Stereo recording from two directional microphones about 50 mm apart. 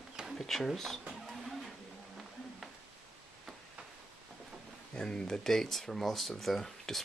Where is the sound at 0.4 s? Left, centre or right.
Centre.